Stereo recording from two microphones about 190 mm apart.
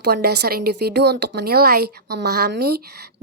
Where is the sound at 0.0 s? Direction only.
60° right (ahead or behind).